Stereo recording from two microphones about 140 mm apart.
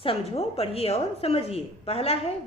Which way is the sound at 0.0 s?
45° left (ahead or behind).